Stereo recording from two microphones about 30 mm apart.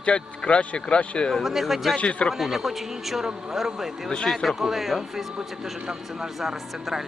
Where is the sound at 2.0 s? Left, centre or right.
Left.